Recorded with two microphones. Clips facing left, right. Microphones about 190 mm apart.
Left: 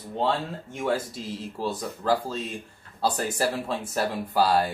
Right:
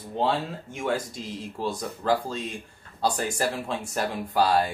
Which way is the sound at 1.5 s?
5° left (ahead or behind).